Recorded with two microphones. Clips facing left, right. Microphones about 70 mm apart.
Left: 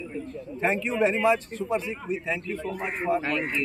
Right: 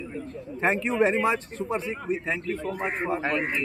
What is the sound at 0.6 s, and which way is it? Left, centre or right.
A man's voice, right.